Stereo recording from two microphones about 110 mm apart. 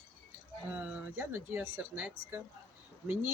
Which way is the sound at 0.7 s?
15° right (ahead or behind).